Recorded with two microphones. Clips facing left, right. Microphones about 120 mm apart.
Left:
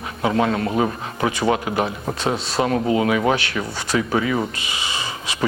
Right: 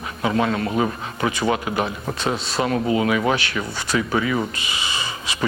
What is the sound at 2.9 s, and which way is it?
Speech, 40° left (ahead or behind).